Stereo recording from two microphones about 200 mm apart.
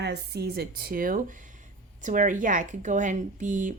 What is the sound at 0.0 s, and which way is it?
Speech, 55° right (ahead or behind).